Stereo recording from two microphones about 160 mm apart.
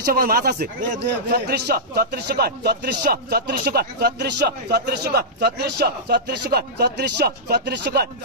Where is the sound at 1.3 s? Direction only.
80° right.